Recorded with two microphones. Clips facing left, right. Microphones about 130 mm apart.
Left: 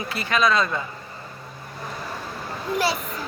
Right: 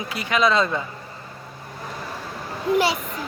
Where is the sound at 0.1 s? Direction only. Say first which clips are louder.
Right 1 dB; 15° right (ahead or behind).